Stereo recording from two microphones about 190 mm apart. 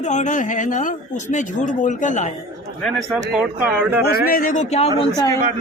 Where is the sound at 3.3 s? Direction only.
10° right (ahead or behind).